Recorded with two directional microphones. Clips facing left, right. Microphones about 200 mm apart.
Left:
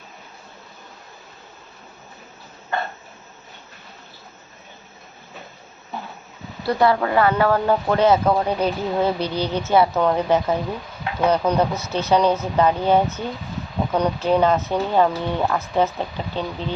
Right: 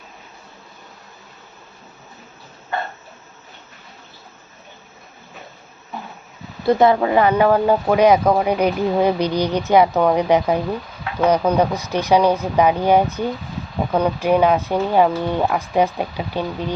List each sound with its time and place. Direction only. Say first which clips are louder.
6.7 s speech: right 4 dB; 20° right (ahead or behind)